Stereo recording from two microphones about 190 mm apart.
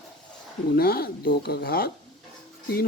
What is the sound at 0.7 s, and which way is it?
Speech, 55° left (ahead or behind).